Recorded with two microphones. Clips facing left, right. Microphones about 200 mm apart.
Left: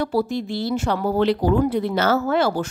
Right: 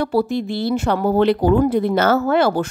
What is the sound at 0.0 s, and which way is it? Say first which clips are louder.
A woman's voice: right 3 dB; 60° right (ahead or behind).